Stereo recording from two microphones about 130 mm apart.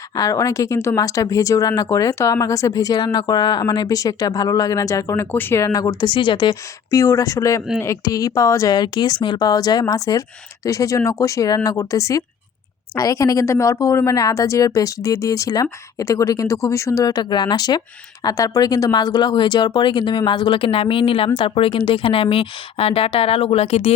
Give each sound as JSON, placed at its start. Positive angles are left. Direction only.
{"t": 0.2, "sound": "speech", "side_deg": 25}
{"t": 7.0, "sound": "speech", "side_deg": 25}
{"t": 8.7, "sound": "speech", "side_deg": 35}